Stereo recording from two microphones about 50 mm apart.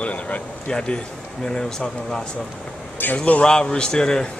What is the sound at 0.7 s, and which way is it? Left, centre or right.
Speech, centre.